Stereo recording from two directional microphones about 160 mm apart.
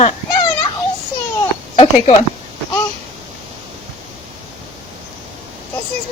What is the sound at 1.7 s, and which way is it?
Speech, 35° left (ahead or behind).